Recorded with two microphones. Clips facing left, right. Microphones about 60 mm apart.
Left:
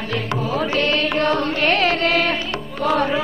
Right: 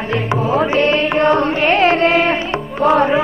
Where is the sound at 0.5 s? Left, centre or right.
Right.